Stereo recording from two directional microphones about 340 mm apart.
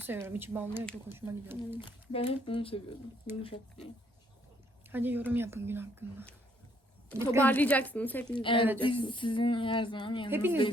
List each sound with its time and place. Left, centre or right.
0.0 s speech: centre
1.8 s speech: centre
4.9 s speech: centre
7.4 s a woman's voice: centre
10.3 s speech: centre